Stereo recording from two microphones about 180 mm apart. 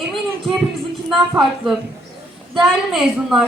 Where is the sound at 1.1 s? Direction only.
Centre (ahead or behind).